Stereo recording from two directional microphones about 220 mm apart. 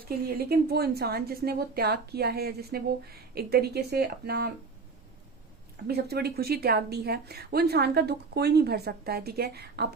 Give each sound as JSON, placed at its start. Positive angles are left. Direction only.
{"t": 0.3, "sound": "a woman's voice", "side_deg": -45}
{"t": 5.9, "sound": "a woman's voice", "side_deg": -45}